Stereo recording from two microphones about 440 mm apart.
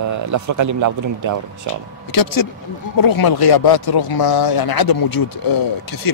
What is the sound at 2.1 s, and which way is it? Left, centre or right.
Speech, left.